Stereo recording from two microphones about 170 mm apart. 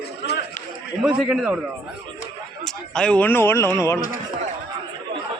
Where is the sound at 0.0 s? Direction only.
75° left (ahead or behind).